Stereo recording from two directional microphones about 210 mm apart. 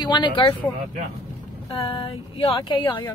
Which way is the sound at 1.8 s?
25° left (ahead or behind).